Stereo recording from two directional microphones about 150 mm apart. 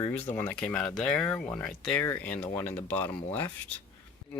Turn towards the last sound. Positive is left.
turn(degrees=15)  # may be behind; listen again after turning